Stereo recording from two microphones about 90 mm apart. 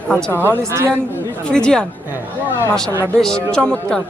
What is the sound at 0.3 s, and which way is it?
Speech, 25° right (ahead or behind).